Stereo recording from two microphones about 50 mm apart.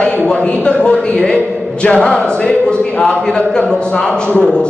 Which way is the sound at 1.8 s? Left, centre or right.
Centre.